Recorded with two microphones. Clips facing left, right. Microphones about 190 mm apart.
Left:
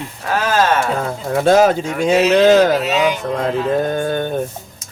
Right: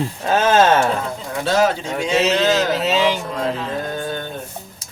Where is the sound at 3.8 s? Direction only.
55° left (ahead or behind).